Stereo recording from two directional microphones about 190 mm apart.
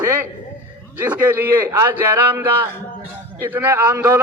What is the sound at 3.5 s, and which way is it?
Speech, 10° right (ahead or behind).